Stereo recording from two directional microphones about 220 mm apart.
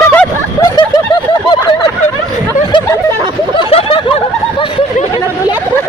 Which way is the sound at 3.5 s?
25° left (ahead or behind).